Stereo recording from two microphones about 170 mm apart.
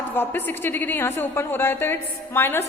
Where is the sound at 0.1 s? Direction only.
10° left (ahead or behind).